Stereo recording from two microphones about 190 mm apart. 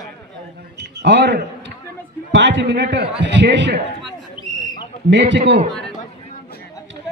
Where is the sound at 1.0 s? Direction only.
65° right (ahead or behind).